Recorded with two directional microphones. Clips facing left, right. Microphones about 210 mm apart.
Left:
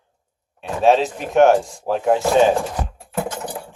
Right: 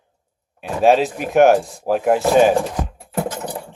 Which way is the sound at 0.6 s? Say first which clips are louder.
Right 1 dB; 5° right (ahead or behind).